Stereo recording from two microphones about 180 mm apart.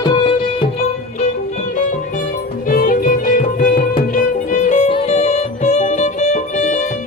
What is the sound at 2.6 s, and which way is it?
Music, 50° left (ahead or behind).